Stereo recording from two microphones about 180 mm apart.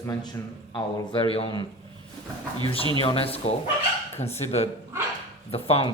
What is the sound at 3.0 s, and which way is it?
Speech, 30° left (ahead or behind).